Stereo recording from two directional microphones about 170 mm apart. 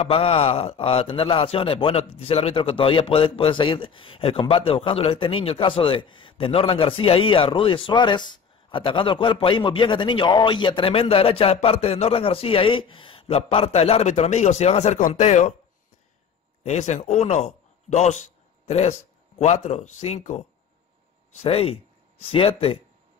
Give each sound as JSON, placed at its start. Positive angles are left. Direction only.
{"t": 0.1, "sound": "a man's voice", "side_deg": 35}
{"t": 16.6, "sound": "a man's voice", "side_deg": 40}